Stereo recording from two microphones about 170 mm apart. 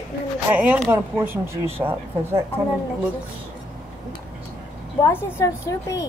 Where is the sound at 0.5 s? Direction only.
10° right (ahead or behind).